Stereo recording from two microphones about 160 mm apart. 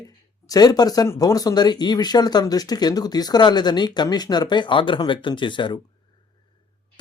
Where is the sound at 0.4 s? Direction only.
20° left (ahead or behind).